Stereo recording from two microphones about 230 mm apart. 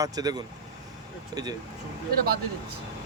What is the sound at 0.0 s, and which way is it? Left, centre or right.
Speech, centre.